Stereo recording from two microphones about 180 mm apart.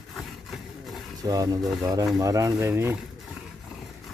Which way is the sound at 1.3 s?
20° right (ahead or behind).